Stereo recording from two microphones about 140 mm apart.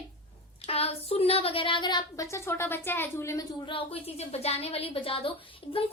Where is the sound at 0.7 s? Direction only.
45° left (ahead or behind); by 3.4 s 20° left (ahead or behind).